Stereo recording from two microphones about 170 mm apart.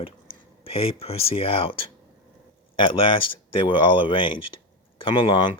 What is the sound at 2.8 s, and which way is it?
Speech, 30° left (ahead or behind).